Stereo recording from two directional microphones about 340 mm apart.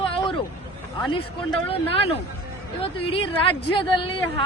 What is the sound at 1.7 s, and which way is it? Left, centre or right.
Speech, centre.